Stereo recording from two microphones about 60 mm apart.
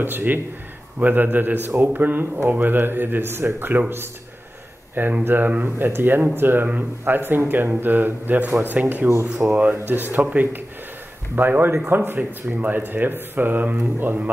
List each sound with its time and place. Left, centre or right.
0.0 s speech: right
5.2 s speech: right